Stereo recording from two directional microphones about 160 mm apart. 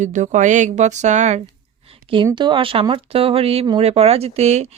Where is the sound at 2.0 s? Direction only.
30° right (ahead or behind).